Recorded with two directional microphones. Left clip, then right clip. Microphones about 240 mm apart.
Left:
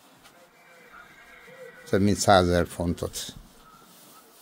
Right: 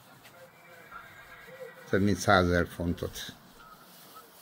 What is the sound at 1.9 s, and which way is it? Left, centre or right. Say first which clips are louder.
Speech: left 5 dB; left.